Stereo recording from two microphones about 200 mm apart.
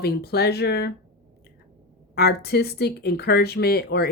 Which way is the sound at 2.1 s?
55° left (ahead or behind).